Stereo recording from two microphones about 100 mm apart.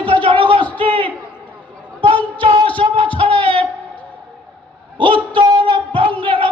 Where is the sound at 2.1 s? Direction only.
15° left (ahead or behind).